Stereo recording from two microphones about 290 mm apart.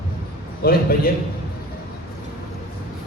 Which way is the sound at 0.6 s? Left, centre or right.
Left.